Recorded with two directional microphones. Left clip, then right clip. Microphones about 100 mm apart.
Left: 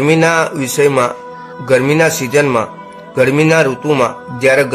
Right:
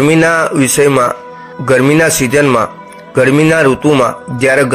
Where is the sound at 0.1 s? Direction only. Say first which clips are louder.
Right 2 dB; 40° right (ahead or behind).